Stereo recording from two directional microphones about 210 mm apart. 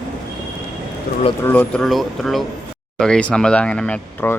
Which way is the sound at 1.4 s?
5° left (ahead or behind).